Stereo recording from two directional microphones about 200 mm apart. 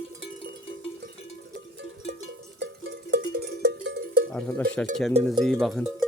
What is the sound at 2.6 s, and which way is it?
Music, 60° right (ahead or behind).